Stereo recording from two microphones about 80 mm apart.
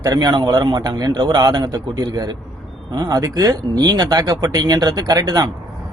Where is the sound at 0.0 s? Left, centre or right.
Right.